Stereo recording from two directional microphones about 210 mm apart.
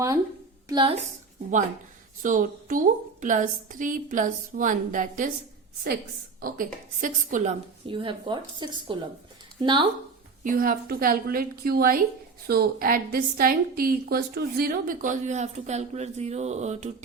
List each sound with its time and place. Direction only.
0.7 s speech: 20° right (ahead or behind)
2.2 s a woman's voice: 40° right (ahead or behind)
6.4 s a woman's voice: 40° right (ahead or behind)
7.9 s speech: 25° right (ahead or behind)
10.4 s a woman's voice: 40° right (ahead or behind)